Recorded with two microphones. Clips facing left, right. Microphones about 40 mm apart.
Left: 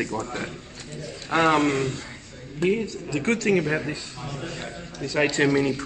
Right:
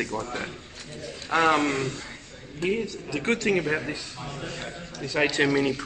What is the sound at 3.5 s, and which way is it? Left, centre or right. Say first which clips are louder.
Speech: left 2 dB; centre.